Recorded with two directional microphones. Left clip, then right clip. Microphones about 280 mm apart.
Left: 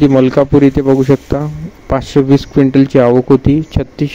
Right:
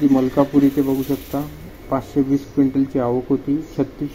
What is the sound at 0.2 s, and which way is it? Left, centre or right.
A man's voice, left.